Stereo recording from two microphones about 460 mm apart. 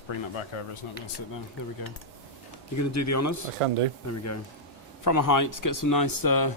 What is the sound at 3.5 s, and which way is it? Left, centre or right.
Speech, right.